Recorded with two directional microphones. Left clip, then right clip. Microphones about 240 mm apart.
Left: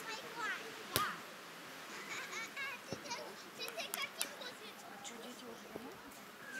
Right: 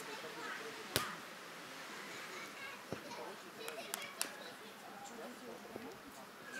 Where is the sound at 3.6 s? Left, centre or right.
Centre.